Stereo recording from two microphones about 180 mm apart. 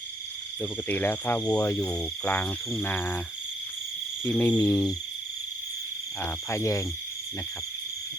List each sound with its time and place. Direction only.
0.6 s speech: 10° left (ahead or behind)
1.9 s speech: 5° left (ahead or behind)
4.2 s speech: 10° left (ahead or behind)
4.5 s frog: 20° left (ahead or behind)
6.2 s speech: 15° left (ahead or behind)